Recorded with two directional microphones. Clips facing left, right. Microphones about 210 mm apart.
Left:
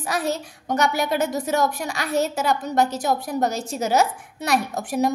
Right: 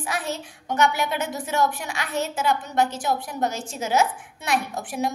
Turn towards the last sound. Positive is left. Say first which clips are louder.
# left 5 dB
turn(degrees=40)  # may be behind; listen again after turning